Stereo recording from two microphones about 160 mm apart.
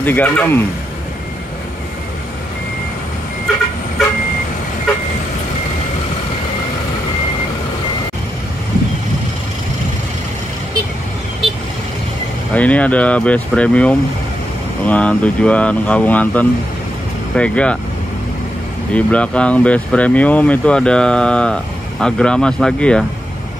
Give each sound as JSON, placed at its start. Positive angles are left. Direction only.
{"t": 0.0, "sound": "speech", "side_deg": 10}
{"t": 12.5, "sound": "speech", "side_deg": 10}
{"t": 18.9, "sound": "speech", "side_deg": 5}